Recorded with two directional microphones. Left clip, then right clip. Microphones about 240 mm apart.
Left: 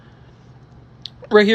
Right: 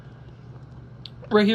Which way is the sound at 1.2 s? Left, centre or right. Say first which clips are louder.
Left 7 dB; centre.